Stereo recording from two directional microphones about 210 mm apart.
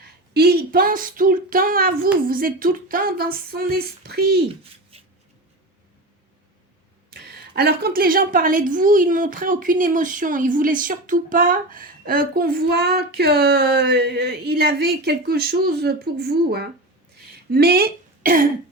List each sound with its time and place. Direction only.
0.0 s a woman's voice: 50° right (ahead or behind)
7.1 s a woman's voice: 50° right (ahead or behind)